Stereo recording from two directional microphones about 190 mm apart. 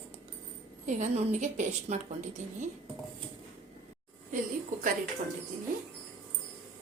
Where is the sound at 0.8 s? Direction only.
40° right (ahead or behind).